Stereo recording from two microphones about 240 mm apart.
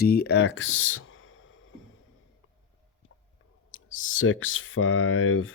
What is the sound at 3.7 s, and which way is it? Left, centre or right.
Speech, left.